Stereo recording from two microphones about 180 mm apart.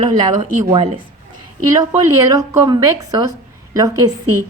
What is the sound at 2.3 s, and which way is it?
A woman's voice, 20° right (ahead or behind).